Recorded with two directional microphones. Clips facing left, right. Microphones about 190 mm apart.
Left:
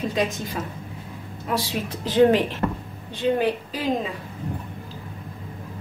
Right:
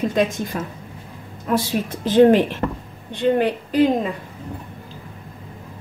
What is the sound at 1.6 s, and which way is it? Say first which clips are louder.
A woman's voice: right 5 dB; 50° right (ahead or behind).